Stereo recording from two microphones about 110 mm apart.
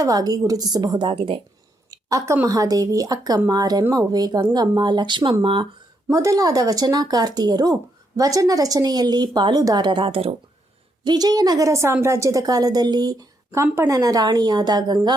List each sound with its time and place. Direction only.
0.0 s speech: 35° right (ahead or behind); by 1.4 s 55° right (ahead or behind)
1.9 s speech: 30° right (ahead or behind); by 5.6 s 50° right (ahead or behind)
6.1 s speech: 30° right (ahead or behind); by 10.3 s 60° right (ahead or behind)
11.0 s speech: 40° right (ahead or behind)